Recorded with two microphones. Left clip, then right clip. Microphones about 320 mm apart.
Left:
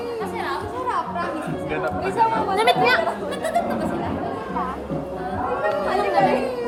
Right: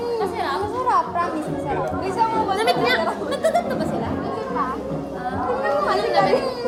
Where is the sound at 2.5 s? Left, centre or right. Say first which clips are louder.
Left 4 dB; left.